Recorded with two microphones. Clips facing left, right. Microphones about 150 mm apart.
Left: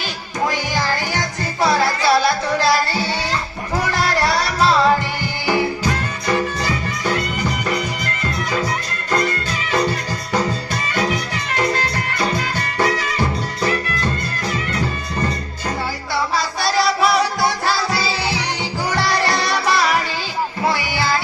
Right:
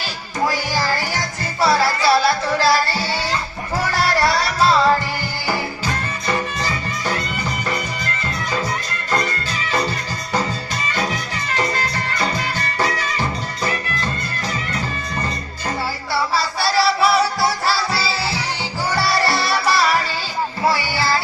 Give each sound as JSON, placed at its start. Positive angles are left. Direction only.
{"t": 0.4, "sound": "music", "side_deg": -5}
{"t": 16.1, "sound": "music", "side_deg": -5}